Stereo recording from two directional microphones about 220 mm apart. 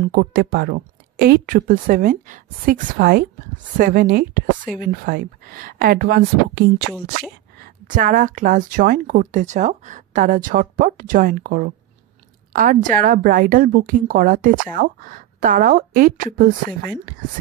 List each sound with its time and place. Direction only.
0.1 s speech: 45° right (ahead or behind)
7.6 s speech: 35° right (ahead or behind)